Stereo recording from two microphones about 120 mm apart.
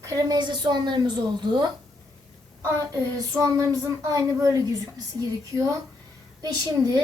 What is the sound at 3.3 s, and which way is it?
A woman's voice, 30° right (ahead or behind).